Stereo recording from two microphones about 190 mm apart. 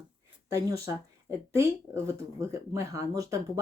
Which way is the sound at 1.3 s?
15° right (ahead or behind).